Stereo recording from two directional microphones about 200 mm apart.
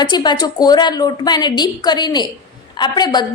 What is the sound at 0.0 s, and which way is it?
A woman's voice, 20° left (ahead or behind).